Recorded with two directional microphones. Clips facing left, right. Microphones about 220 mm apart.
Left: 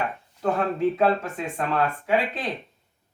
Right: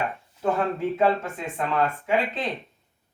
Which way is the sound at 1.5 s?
15° right (ahead or behind).